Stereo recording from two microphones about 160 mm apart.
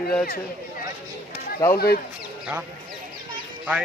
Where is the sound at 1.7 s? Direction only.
75° left (ahead or behind).